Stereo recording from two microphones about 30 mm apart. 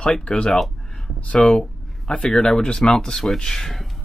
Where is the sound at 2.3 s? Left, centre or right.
Centre.